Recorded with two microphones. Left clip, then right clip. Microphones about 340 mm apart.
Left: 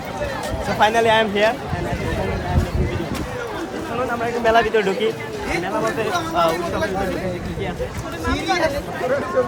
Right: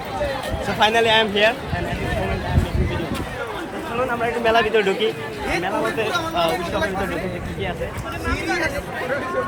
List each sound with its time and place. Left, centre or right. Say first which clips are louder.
0.8 s speech: left 1 dB; centre
4.2 s speech: left 2 dB; centre
8.4 s speech: left 4 dB; left